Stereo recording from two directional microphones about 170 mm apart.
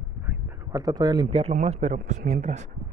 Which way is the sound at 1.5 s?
45° right (ahead or behind).